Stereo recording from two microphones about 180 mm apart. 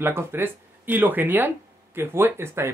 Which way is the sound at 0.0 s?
15° right (ahead or behind).